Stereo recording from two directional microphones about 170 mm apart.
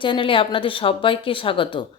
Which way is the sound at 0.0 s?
30° left (ahead or behind).